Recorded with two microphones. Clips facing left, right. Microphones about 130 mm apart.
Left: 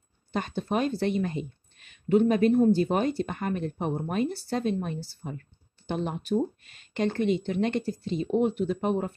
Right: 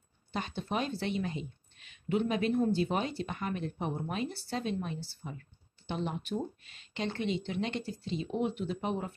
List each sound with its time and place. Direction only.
0.3 s a woman's voice: 45° left (ahead or behind)